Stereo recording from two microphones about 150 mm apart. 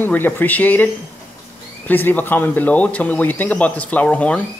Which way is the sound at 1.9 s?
10° left (ahead or behind).